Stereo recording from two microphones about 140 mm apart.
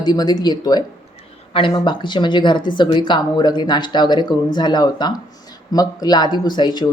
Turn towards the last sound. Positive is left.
turn(degrees=30)  # may be behind; listen again after turning